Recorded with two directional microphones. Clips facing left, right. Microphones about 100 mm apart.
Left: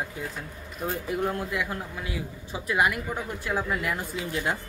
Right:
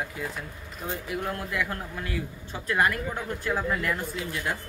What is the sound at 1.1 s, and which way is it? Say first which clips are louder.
Speech: left 3 dB; 20° left (ahead or behind).